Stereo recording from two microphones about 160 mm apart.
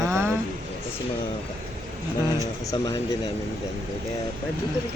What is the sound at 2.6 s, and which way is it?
Speech, 25° left (ahead or behind).